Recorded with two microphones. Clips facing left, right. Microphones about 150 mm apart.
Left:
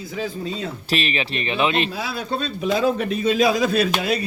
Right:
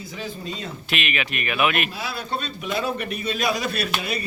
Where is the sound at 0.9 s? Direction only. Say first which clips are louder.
Left 3 dB; 35° left (ahead or behind).